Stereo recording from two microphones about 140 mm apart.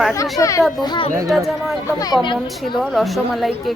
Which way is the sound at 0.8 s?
35° left (ahead or behind).